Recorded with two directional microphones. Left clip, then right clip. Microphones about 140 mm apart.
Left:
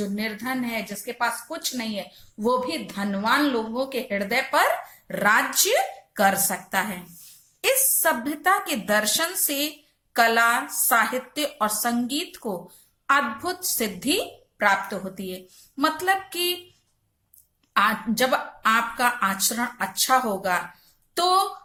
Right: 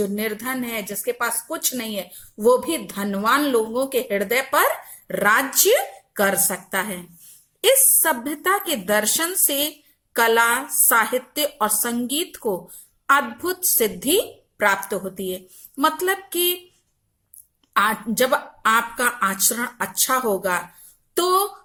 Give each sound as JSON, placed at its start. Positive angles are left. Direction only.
{"t": 0.0, "sound": "speech", "side_deg": -40}
{"t": 8.0, "sound": "speech", "side_deg": -30}
{"t": 17.7, "sound": "speech", "side_deg": -40}